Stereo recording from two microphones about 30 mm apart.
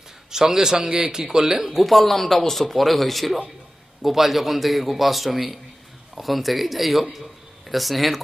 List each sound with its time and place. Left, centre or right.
0.3 s a man's voice: centre